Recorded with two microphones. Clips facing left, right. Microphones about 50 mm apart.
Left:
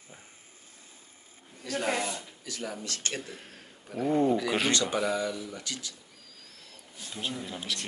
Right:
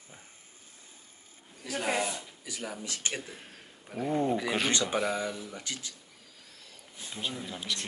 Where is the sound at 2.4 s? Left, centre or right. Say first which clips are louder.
Left 2 dB; centre.